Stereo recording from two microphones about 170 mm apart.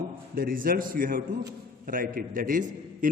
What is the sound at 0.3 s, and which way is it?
A man's voice, 55° right (ahead or behind).